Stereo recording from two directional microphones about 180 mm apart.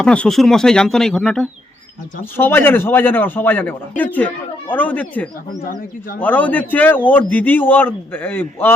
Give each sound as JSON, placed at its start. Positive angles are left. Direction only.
{"t": 0.0, "sound": "a man's voice", "side_deg": 5}
{"t": 5.5, "sound": "speech", "side_deg": 50}
{"t": 6.1, "sound": "a man's voice", "side_deg": 10}